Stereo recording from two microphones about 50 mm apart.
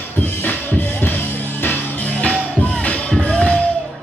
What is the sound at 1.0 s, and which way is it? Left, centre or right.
Music, left.